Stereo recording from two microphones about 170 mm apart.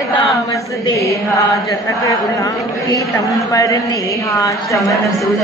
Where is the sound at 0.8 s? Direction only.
20° left (ahead or behind).